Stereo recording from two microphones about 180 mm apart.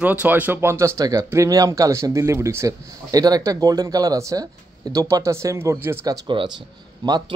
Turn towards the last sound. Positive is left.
turn(degrees=-25)  # may be behind; listen again after turning